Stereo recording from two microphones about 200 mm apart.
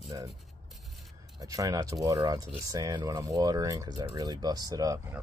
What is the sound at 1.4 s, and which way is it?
Speech, 15° right (ahead or behind).